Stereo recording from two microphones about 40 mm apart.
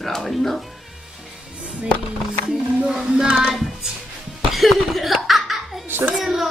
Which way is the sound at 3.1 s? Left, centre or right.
Centre.